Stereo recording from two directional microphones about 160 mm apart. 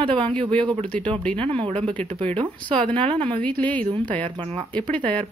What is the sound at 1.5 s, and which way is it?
Speech, 35° right (ahead or behind).